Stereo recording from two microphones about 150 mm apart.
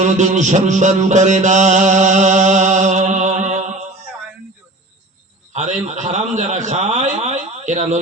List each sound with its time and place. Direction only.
0.0 s music: 50° right (ahead or behind)
5.5 s a man's voice: 50° right (ahead or behind)